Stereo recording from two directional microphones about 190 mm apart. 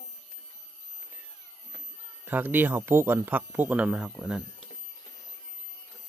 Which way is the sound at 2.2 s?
10° right (ahead or behind).